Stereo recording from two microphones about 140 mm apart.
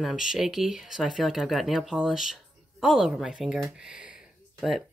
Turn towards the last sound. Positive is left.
turn(degrees=-5)  # may be behind; listen again after turning